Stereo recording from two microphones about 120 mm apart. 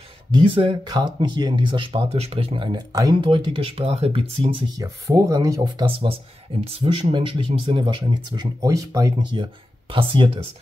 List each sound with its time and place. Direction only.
0.3 s speech: 45° right (ahead or behind)
2.9 s speech: 35° right (ahead or behind); by 4.5 s 50° right (ahead or behind)
4.7 s speech: 30° right (ahead or behind)
5.9 s speech: 50° right (ahead or behind); by 9.3 s 30° right (ahead or behind)
9.3 s speech: 45° right (ahead or behind)